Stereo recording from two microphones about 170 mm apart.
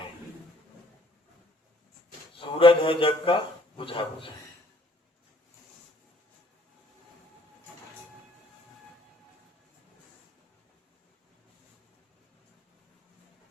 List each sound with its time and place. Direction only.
2.4 s a man's voice: 30° left (ahead or behind)